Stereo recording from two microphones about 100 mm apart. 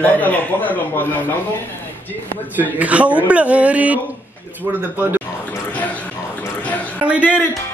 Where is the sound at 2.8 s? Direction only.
15° right (ahead or behind).